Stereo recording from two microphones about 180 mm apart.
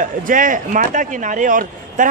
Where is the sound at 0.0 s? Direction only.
45° right (ahead or behind).